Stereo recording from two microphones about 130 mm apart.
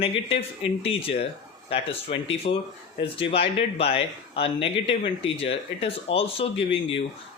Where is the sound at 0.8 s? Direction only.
45° left (ahead or behind).